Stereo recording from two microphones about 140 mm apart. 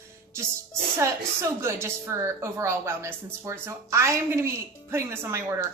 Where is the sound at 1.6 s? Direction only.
20° right (ahead or behind).